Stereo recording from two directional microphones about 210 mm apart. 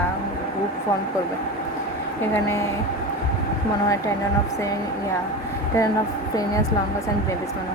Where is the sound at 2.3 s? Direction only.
15° left (ahead or behind).